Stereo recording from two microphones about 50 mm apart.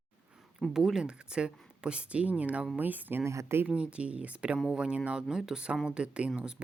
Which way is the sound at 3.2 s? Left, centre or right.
Right.